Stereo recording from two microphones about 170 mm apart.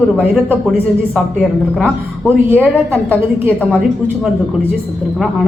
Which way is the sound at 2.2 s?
10° right (ahead or behind).